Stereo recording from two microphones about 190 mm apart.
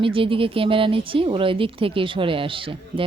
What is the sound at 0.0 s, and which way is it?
Speech, 30° right (ahead or behind).